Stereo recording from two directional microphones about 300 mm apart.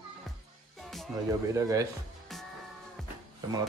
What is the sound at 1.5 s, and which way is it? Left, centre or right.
Speech, centre.